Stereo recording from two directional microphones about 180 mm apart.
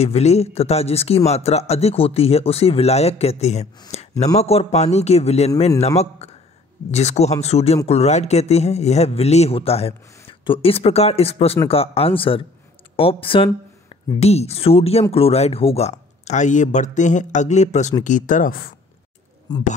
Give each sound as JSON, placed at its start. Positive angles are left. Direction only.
{"t": 0.0, "sound": "a man's voice", "side_deg": 35}